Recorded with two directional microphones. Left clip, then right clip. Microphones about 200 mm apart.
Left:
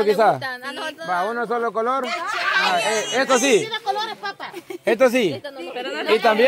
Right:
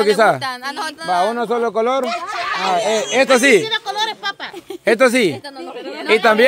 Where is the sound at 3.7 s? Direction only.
65° right (ahead or behind).